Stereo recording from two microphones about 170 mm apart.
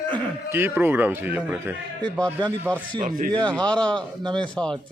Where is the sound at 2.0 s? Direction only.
10° left (ahead or behind).